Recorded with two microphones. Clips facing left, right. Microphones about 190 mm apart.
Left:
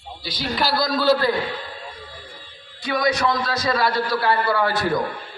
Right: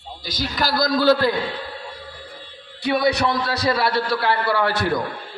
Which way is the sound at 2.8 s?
65° right (ahead or behind).